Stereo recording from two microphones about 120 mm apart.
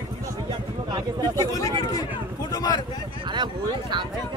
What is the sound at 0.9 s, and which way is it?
Speech, 35° right (ahead or behind).